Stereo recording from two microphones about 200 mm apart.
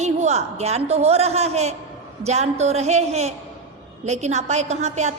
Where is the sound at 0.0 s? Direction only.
35° right (ahead or behind).